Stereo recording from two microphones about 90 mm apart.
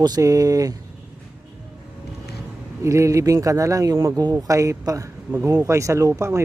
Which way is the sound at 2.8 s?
35° right (ahead or behind).